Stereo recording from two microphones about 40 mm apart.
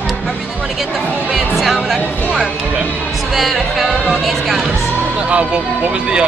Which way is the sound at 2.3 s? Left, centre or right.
Right.